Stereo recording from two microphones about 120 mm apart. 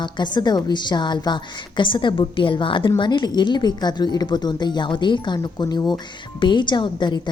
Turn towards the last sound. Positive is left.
turn(degrees=40)  # may be behind; listen again after turning